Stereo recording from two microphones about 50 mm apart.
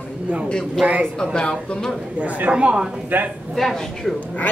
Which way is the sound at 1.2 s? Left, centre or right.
Centre.